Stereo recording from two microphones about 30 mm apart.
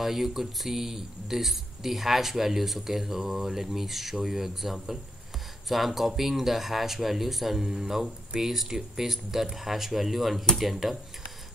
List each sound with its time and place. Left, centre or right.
0.0 s speech: centre